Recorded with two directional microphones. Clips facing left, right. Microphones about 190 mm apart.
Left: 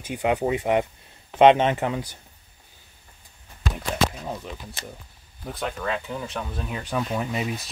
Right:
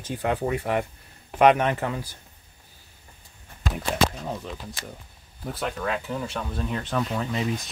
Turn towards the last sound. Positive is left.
turn(degrees=10)  # may be behind; listen again after turning